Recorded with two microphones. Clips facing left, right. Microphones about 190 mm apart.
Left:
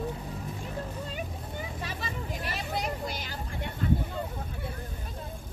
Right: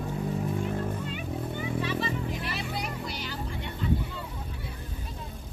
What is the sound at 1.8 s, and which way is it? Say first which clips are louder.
Vehicle: right 7 dB; 45° left (ahead or behind).